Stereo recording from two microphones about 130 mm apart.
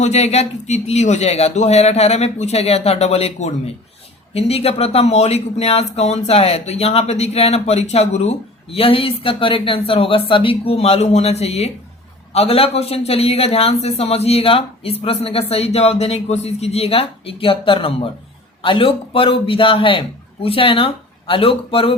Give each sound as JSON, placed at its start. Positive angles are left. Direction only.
{"t": 0.0, "sound": "speech", "side_deg": 60}